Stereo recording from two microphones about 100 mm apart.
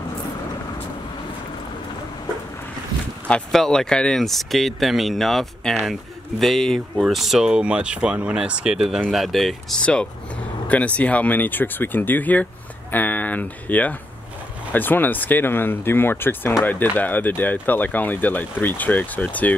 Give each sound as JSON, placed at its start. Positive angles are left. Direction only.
{"t": 3.3, "sound": "speech", "side_deg": 10}
{"t": 8.8, "sound": "speech", "side_deg": 0}